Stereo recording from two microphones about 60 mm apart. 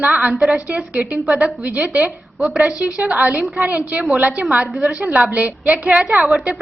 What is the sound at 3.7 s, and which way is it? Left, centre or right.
A woman's voice, right.